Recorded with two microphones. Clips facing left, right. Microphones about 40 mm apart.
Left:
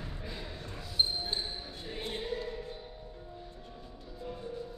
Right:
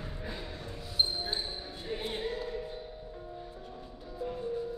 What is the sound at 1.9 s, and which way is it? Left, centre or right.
Music, centre.